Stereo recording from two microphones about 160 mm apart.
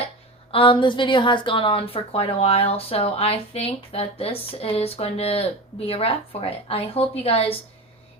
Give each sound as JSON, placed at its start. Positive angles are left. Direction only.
{"t": 0.5, "sound": "a woman's voice", "side_deg": 35}